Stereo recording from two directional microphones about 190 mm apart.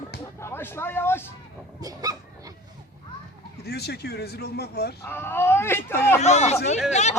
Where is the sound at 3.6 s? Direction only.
60° left (ahead or behind).